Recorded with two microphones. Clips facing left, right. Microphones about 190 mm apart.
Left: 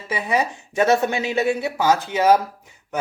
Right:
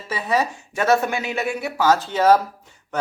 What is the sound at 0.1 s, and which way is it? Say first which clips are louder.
Speech: even; 15° left (ahead or behind).